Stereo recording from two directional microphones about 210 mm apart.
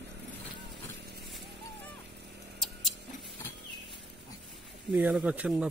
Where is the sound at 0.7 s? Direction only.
50° right (ahead or behind).